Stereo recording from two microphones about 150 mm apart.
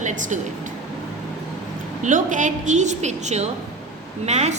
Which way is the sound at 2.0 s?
60° right (ahead or behind).